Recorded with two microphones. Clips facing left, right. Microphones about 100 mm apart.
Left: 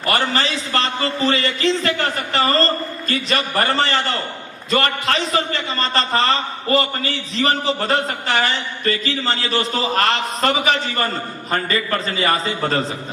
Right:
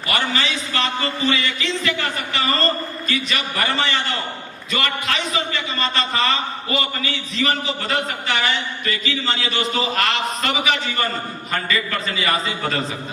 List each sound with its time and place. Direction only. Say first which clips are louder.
0.0 s a man's voice: left 3 dB; 40° left (ahead or behind)